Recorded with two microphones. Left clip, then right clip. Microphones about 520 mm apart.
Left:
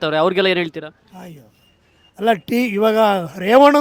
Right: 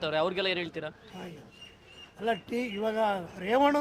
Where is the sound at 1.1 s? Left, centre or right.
Left.